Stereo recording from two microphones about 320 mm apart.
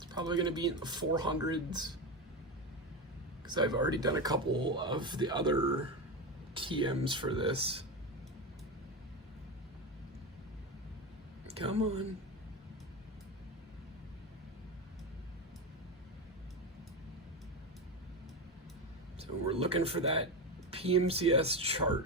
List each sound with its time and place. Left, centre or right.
0.0 s speech: centre
3.4 s speech: centre
11.4 s a sound: centre
19.2 s speech: centre